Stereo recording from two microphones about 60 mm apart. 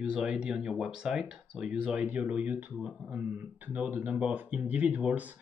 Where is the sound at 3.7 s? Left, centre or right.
Right.